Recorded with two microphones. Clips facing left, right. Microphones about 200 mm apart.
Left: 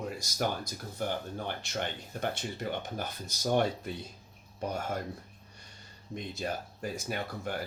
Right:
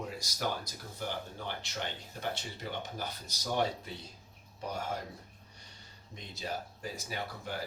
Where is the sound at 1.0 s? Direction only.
50° left (ahead or behind).